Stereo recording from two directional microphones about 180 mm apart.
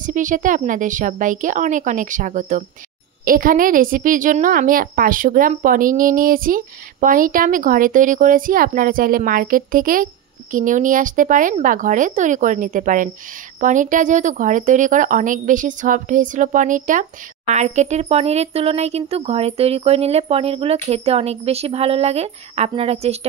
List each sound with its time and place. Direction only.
0.0 s a woman's voice: 45° right (ahead or behind)